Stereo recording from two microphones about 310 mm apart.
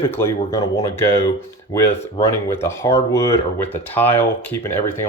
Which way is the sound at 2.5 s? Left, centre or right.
Centre.